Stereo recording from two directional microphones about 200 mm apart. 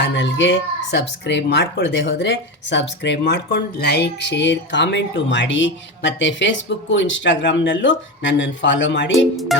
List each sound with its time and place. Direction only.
0.0 s speech: 65° left (ahead or behind)
9.1 s speech: centre (ahead or behind)